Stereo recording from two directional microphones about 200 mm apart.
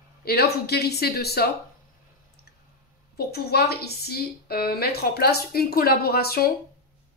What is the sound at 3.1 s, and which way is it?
A woman's voice, 50° left (ahead or behind).